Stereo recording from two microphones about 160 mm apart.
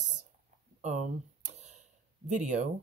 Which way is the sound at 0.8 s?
50° right (ahead or behind).